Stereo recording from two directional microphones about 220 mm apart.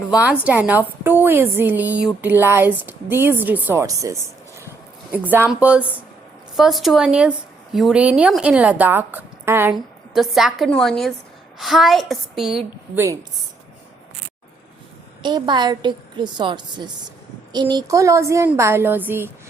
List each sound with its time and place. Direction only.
0.1 s a woman's voice: 5° right (ahead or behind)
15.2 s a woman's voice: 20° right (ahead or behind)